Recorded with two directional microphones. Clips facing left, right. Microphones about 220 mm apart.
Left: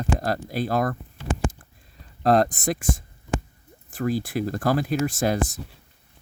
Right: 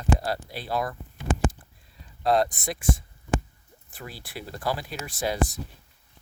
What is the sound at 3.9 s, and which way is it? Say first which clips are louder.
Speech: left 15 dB; 45° left (ahead or behind).